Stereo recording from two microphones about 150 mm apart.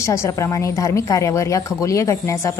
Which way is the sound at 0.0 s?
20° left (ahead or behind).